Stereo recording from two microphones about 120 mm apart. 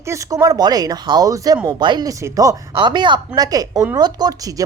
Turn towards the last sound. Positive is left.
turn(degrees=-30)  # may be behind; listen again after turning